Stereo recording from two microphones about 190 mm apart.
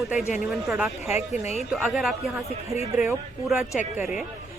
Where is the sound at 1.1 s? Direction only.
35° left (ahead or behind).